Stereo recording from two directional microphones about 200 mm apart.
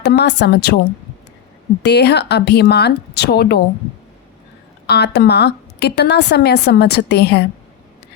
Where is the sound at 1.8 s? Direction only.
55° left (ahead or behind).